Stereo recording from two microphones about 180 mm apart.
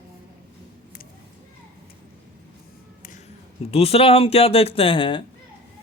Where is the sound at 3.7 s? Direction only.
35° left (ahead or behind).